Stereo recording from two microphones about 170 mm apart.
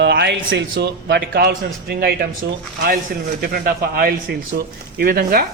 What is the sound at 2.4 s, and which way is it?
Speech, 90° right.